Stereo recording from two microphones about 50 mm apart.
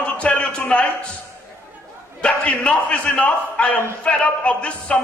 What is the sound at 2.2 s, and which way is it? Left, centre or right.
A man's voice, left.